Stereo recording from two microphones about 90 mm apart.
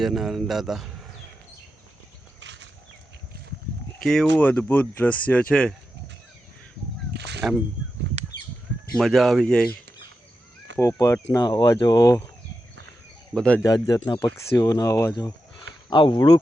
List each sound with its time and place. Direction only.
0.0 s a man's voice: 5° right (ahead or behind)
4.0 s speech: 5° left (ahead or behind)
4.4 s speech: 20° left (ahead or behind)
7.4 s a man's voice: 5° right (ahead or behind)
8.9 s a man's voice: centre (ahead or behind)
10.8 s speech: 35° left (ahead or behind)
11.4 s speech: 50° left (ahead or behind)
13.3 s speech: 10° left (ahead or behind)
13.6 s speech: 50° left (ahead or behind)
14.3 s speech: 35° left (ahead or behind)
15.1 s speech: 55° left (ahead or behind)